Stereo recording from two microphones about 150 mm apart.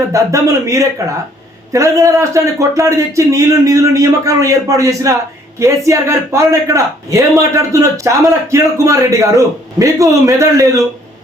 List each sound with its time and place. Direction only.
0.1 s a man's voice: 20° right (ahead or behind)